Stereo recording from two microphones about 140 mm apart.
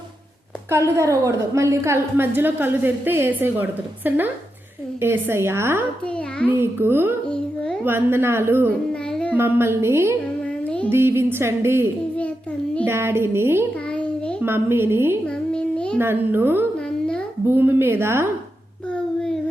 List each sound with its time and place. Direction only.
0.7 s a woman's voice: 20° right (ahead or behind)
7.3 s a child's voice: 5° left (ahead or behind)
7.9 s a woman's voice: 15° right (ahead or behind)
8.9 s music: 5° left (ahead or behind)
9.3 s a woman's voice: 15° right (ahead or behind)
13.9 s a sound: 10° left (ahead or behind)
14.4 s a woman's voice: 15° right (ahead or behind)
15.5 s child singing: 5° left (ahead or behind)
16.0 s a woman's voice: 15° right (ahead or behind)